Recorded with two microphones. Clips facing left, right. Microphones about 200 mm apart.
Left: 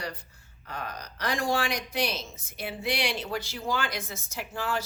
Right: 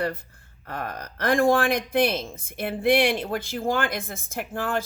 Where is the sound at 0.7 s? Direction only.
55° right (ahead or behind).